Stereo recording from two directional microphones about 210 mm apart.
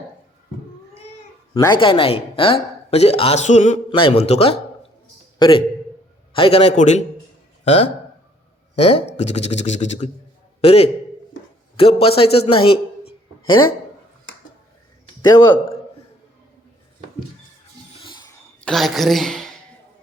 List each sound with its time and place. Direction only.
1.5 s speech: 20° left (ahead or behind)
3.8 s a man's voice: 25° left (ahead or behind)
15.2 s speech: 20° left (ahead or behind)
18.0 s a sound: 20° left (ahead or behind)
18.6 s a woman's voice: centre (ahead or behind)